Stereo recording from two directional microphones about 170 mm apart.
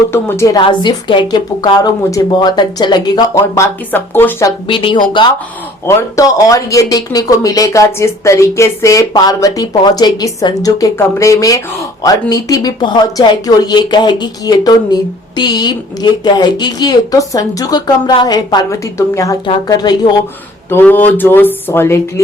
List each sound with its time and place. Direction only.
0.1 s speech: 15° left (ahead or behind)
4.6 s speech: 30° left (ahead or behind)
5.8 s speech: 15° left (ahead or behind)